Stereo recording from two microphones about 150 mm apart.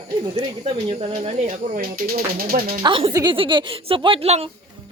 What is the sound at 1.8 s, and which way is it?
Speech, 75° right (ahead or behind).